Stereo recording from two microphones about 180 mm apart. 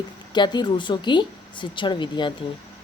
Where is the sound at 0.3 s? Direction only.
25° left (ahead or behind).